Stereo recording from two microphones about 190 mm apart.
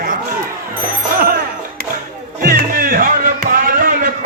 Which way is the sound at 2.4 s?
50° right (ahead or behind).